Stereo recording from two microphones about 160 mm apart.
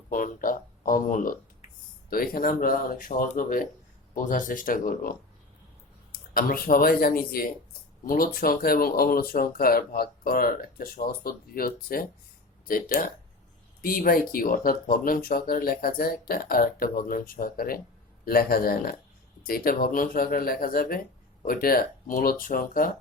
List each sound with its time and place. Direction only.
0.1 s speech: 60° left (ahead or behind)